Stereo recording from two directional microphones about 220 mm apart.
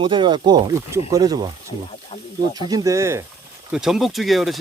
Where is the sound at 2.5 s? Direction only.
15° right (ahead or behind).